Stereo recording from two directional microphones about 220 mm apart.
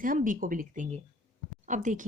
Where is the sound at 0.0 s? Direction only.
40° right (ahead or behind).